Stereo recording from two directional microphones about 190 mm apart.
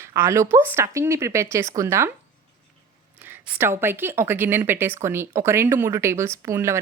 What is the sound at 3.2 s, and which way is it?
A woman's voice, 10° right (ahead or behind).